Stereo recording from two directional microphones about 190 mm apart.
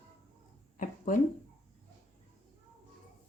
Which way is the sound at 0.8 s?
45° left (ahead or behind).